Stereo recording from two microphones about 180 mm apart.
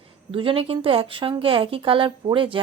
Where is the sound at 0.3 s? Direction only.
30° right (ahead or behind).